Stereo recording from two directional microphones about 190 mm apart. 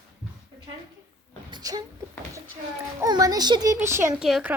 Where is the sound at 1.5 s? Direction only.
20° right (ahead or behind).